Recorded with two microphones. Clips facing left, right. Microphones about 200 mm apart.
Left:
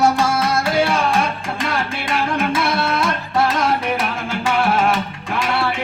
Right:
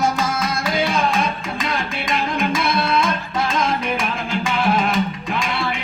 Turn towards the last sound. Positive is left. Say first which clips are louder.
# left 2 dB
turn(degrees=75)  # may be behind; listen again after turning